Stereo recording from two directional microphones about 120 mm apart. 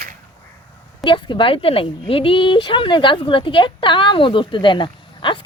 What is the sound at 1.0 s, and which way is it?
A woman's voice, 45° left (ahead or behind).